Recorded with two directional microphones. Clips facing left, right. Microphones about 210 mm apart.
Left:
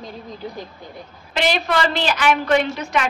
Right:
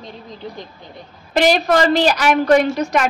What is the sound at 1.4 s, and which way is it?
A woman's voice, 40° right (ahead or behind).